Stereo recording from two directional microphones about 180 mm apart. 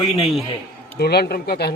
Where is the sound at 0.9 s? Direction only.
60° left (ahead or behind).